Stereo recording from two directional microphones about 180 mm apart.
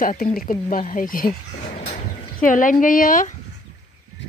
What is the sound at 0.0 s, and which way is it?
Speech, 50° left (ahead or behind).